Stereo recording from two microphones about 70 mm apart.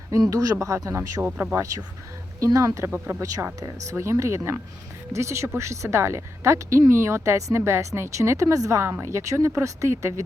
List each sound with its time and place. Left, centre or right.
0.3 s speech: right
2.4 s speech: right